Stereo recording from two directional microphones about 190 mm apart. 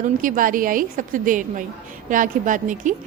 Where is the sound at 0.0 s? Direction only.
45° right (ahead or behind).